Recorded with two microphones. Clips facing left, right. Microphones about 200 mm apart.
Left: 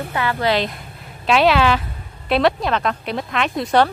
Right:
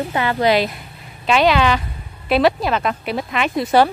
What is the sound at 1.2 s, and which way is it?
A woman's voice, centre (ahead or behind).